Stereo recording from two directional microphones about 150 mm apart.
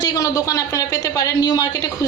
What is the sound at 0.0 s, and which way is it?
A woman's voice, 25° left (ahead or behind).